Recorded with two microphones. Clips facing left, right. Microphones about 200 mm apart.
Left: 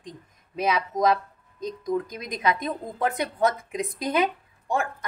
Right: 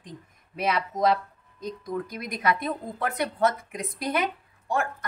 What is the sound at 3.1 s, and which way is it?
A woman's voice, 20° left (ahead or behind).